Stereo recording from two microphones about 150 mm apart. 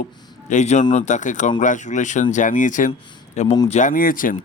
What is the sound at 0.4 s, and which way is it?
Speech, 50° left (ahead or behind).